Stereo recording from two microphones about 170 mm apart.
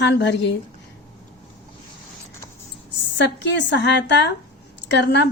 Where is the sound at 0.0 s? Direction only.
90° left.